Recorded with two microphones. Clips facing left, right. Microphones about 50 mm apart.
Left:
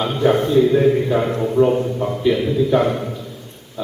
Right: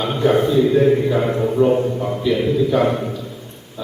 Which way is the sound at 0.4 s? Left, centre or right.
Centre.